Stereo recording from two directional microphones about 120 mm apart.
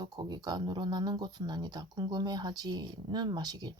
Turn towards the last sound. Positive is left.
turn(degrees=-35)  # may be behind; listen again after turning